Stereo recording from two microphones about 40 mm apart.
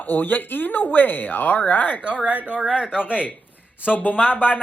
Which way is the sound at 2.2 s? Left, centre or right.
Right.